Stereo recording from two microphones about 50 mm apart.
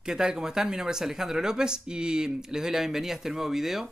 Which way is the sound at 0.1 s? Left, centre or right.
Centre.